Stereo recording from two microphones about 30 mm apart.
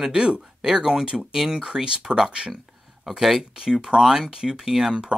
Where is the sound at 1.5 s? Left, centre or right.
Right.